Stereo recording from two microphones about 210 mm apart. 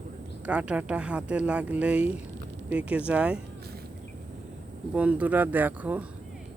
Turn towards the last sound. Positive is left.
turn(degrees=-5)  # may be behind; listen again after turning